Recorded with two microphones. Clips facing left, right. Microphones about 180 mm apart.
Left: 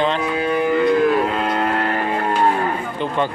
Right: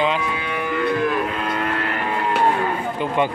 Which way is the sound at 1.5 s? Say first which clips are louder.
Left 4 dB; 40° left (ahead or behind).